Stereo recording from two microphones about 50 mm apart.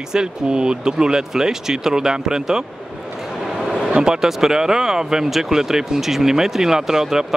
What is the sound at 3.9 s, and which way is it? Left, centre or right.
Speech, centre.